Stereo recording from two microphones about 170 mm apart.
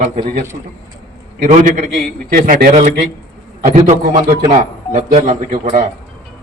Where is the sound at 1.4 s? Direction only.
45° right (ahead or behind).